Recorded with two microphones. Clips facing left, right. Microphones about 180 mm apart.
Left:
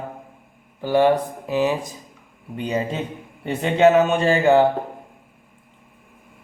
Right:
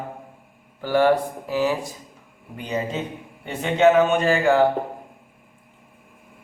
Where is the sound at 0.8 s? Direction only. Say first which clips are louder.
Left 1 dB; 20° left (ahead or behind).